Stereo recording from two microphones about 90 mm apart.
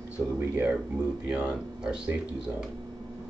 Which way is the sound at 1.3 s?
10° right (ahead or behind).